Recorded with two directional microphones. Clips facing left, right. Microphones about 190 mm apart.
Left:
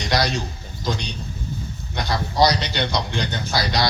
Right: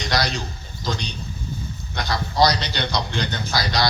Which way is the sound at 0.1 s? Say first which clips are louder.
Left 3 dB; 20° left (ahead or behind).